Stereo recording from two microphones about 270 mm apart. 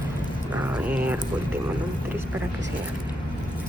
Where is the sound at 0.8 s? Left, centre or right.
Centre.